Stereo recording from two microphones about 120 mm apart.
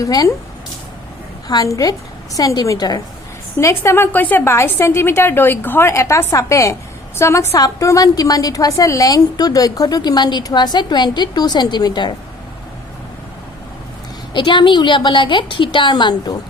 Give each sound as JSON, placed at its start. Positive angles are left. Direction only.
{"t": 0.0, "sound": "a woman's voice", "side_deg": 30}
{"t": 1.5, "sound": "a woman's voice", "side_deg": 30}
{"t": 14.3, "sound": "a woman's voice", "side_deg": 40}